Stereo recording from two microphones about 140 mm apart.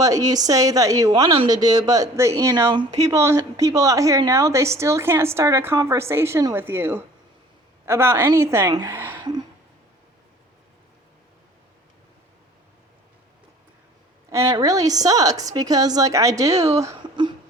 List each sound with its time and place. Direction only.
0.0 s a woman's voice: 25° right (ahead or behind)
14.3 s speech: 20° right (ahead or behind)
17.0 s a sound: 35° right (ahead or behind)